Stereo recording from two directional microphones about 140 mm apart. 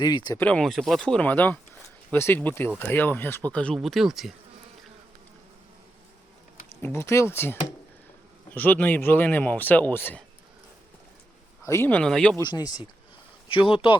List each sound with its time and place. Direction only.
0.0 s speech: 30° left (ahead or behind)
0.3 s speech: 10° left (ahead or behind)
6.8 s speech: 20° left (ahead or behind)
11.6 s speech: 20° left (ahead or behind)
12.4 s speech: 30° left (ahead or behind)